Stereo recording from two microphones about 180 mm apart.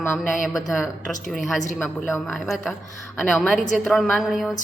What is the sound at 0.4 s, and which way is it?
A man's voice, centre (ahead or behind).